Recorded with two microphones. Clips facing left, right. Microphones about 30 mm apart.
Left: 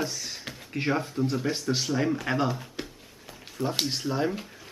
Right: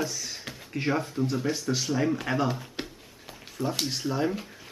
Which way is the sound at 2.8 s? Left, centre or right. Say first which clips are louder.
Right 1 dB; right.